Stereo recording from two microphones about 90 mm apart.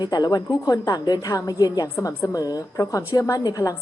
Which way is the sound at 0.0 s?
50° left (ahead or behind).